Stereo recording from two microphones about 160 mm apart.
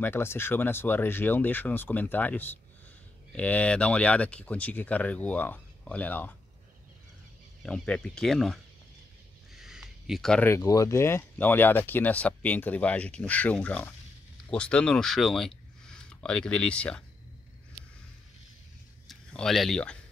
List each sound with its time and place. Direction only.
0.0 s speech: 15° left (ahead or behind)
7.6 s speech: 5° left (ahead or behind)
9.6 s a sound: 5° right (ahead or behind)
10.5 s speech: 20° left (ahead or behind)
19.0 s speech: centre (ahead or behind)